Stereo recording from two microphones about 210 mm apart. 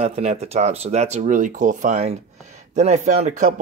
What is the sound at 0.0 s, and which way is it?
Speech, 30° right (ahead or behind).